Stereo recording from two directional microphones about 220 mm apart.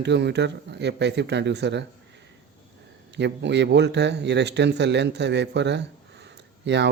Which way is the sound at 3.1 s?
50° right (ahead or behind).